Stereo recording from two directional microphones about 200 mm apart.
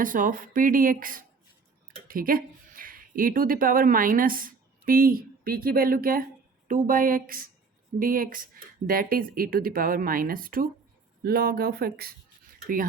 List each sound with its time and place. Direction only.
0.0 s speech: 45° right (ahead or behind)